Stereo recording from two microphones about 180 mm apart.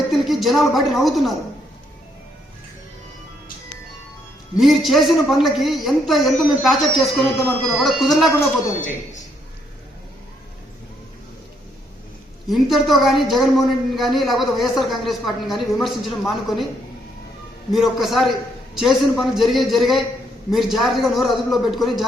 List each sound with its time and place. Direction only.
0.1 s speech: centre (ahead or behind)
4.5 s a man's voice: centre (ahead or behind)
12.5 s a man's voice: centre (ahead or behind)
17.7 s a man's voice: centre (ahead or behind)